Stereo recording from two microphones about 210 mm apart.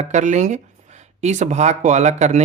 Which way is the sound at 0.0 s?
35° right (ahead or behind).